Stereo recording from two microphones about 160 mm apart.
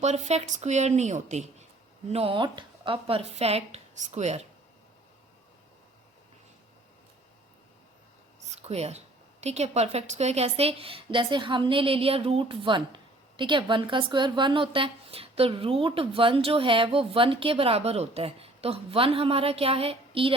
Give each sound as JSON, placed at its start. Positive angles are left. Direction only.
{"t": 0.0, "sound": "speech", "side_deg": -45}
{"t": 2.1, "sound": "a woman's voice", "side_deg": -35}
{"t": 8.4, "sound": "a woman's voice", "side_deg": -40}